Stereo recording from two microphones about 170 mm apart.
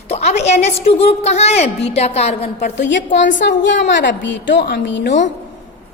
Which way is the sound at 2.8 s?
90° left.